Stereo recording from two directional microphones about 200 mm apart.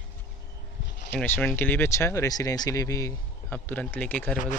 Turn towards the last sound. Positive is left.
turn(degrees=5)  # may be behind; listen again after turning